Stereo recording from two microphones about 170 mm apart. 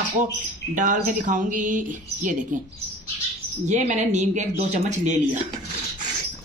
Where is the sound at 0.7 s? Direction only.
50° right (ahead or behind).